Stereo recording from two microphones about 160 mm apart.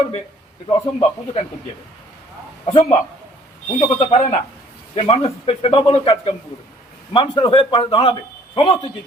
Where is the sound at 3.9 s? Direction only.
40° left (ahead or behind).